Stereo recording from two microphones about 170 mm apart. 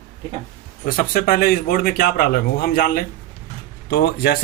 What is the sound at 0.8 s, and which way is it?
Speech, 60° left (ahead or behind).